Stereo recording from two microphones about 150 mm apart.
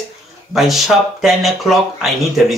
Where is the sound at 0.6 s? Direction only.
Centre (ahead or behind).